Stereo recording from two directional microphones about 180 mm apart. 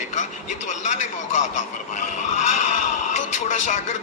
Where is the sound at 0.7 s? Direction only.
40° left (ahead or behind).